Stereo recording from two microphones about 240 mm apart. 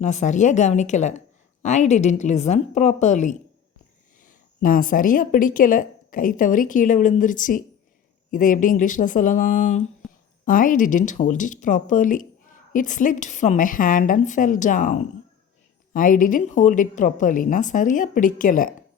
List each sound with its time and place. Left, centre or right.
0.0 s a woman's voice: left